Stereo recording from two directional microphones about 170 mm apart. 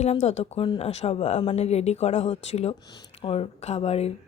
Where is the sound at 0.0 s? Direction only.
40° left (ahead or behind).